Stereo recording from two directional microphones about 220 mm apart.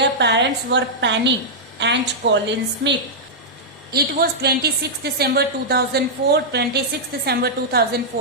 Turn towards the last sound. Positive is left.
turn(degrees=-45)  # may be behind; listen again after turning